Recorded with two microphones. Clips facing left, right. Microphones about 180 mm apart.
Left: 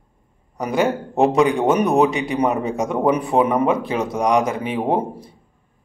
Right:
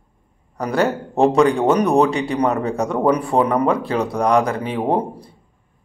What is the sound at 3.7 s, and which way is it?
A man's voice, 20° left (ahead or behind).